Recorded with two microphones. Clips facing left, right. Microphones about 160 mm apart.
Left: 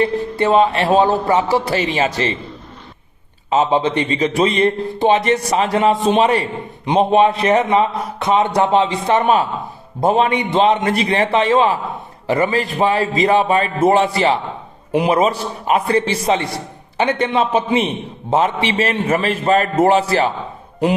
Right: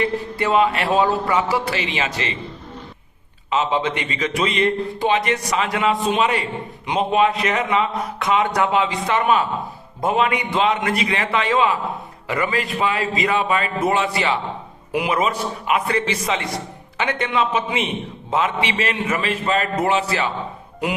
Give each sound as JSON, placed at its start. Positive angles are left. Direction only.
{"t": 0.0, "sound": "a man's voice", "side_deg": 30}
{"t": 3.5, "sound": "a man's voice", "side_deg": 35}